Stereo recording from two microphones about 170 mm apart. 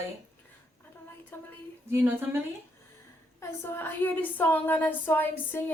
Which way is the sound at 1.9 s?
15° right (ahead or behind).